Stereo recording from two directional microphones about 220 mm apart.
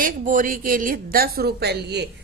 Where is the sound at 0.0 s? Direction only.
35° right (ahead or behind).